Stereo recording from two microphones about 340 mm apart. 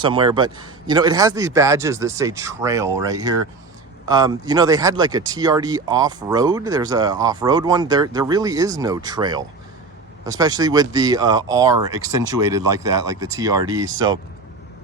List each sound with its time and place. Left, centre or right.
0.0 s speech: centre